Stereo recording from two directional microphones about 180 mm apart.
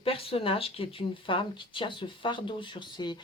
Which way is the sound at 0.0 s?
30° left (ahead or behind).